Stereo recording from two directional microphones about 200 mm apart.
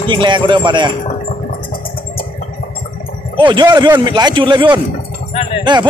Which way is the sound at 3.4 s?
25° right (ahead or behind).